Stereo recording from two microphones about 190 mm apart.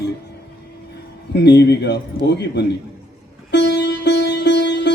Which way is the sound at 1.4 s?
60° left (ahead or behind).